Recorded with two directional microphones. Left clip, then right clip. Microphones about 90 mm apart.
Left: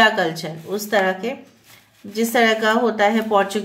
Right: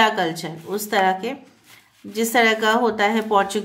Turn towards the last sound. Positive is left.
turn(degrees=-40)  # may be behind; listen again after turning